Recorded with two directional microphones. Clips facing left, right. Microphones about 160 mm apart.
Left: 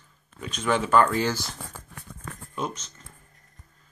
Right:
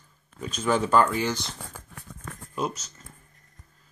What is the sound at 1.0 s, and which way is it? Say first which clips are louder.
Speech: left 1 dB; 15° right (ahead or behind).